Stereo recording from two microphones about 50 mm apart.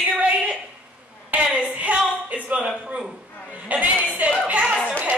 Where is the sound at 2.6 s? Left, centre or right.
Centre.